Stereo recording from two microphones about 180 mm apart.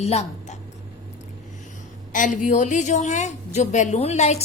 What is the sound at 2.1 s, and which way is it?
A woman's voice, 45° left (ahead or behind).